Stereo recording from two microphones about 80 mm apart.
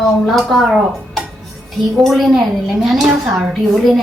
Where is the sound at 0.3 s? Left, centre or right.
Centre.